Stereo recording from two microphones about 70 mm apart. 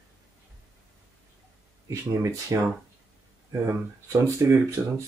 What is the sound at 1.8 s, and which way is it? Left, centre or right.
Speech, right.